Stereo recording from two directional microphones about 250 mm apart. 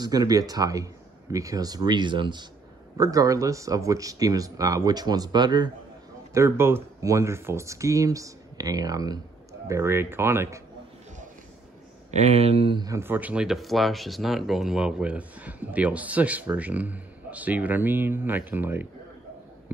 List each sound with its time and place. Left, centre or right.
0.0 s speech: centre
12.1 s speech: right; by 18.9 s centre